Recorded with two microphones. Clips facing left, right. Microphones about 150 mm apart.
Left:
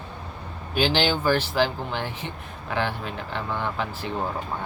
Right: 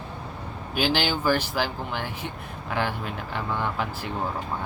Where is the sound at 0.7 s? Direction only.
10° right (ahead or behind).